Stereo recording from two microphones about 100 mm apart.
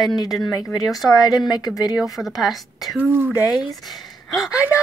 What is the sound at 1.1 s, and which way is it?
Speech, 40° left (ahead or behind).